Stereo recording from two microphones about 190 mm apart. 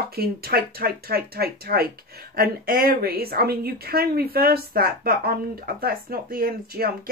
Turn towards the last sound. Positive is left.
turn(degrees=-50)  # may be behind; listen again after turning